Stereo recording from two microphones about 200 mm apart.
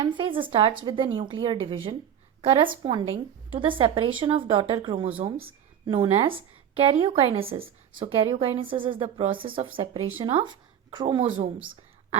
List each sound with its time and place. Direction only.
0.0 s a woman's voice: 25° right (ahead or behind)